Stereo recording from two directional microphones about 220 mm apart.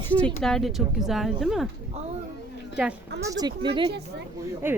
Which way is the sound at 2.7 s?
5° right (ahead or behind).